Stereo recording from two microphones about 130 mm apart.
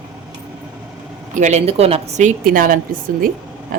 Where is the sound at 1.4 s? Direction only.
60° right (ahead or behind).